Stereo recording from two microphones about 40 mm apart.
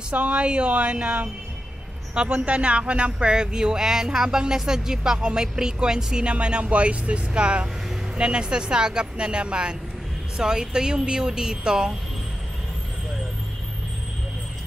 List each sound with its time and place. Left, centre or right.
0.1 s speech: right
2.4 s speech: right
6.2 s speech: right